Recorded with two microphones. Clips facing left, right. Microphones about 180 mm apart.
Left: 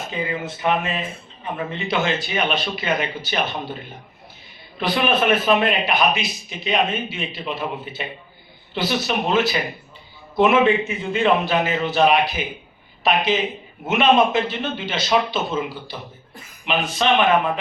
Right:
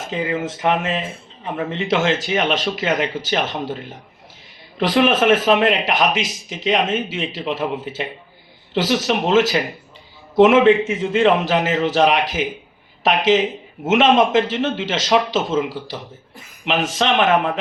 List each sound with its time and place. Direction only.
0.1 s a man's voice: 90° right
4.8 s a man's voice: 90° right